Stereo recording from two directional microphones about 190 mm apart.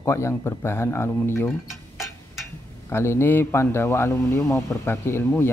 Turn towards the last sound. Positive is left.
turn(degrees=10)  # may be behind; listen again after turning